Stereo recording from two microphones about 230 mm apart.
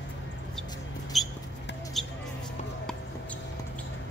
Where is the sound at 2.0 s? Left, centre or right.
Centre.